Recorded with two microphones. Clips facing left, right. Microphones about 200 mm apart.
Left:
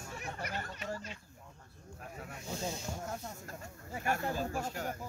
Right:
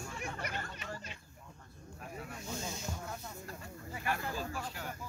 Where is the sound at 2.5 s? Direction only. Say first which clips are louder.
Left 3 dB; 35° left (ahead or behind).